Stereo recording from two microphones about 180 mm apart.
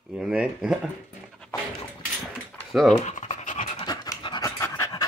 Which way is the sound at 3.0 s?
40° left (ahead or behind).